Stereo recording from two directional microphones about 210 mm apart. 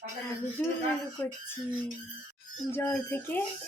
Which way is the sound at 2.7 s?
5° left (ahead or behind).